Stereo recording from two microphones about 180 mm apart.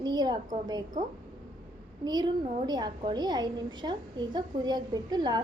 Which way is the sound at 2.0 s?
25° right (ahead or behind).